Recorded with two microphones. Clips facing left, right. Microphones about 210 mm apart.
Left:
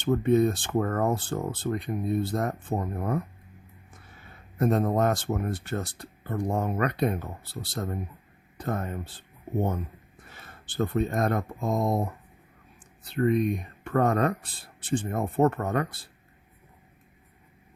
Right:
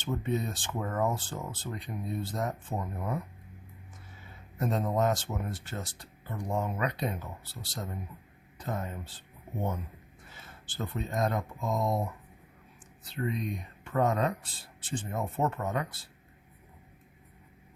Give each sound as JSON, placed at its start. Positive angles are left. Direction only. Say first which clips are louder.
{"t": 0.0, "sound": "speech", "louder": "left 10 dB", "side_deg": 55}
{"t": 10.2, "sound": "speech", "louder": "left 2 dB", "side_deg": 60}
{"t": 13.1, "sound": "speech", "louder": "left 10 dB", "side_deg": 60}